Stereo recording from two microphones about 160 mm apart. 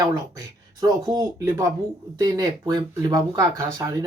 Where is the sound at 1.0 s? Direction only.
20° right (ahead or behind).